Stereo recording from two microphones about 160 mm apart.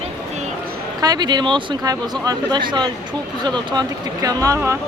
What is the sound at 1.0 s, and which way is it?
Speech, 25° right (ahead or behind).